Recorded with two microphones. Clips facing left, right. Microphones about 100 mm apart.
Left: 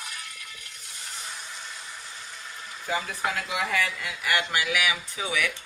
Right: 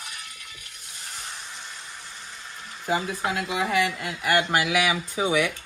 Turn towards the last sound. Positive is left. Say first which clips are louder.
# right 6 dB
turn(degrees=-25)  # may be behind; listen again after turning